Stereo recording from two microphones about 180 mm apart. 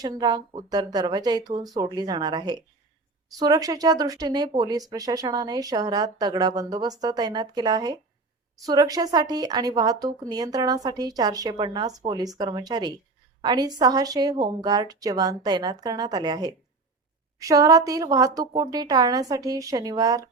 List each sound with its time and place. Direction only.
0.0 s speech: 25° right (ahead or behind)